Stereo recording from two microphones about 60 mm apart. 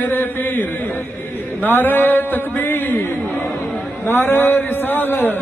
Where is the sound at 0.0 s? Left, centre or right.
Left.